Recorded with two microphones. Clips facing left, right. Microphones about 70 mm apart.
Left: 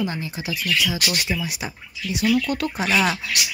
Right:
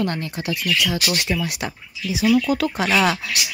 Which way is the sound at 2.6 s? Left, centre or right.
Right.